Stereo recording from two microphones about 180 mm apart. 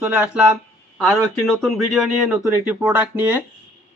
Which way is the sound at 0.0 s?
5° right (ahead or behind).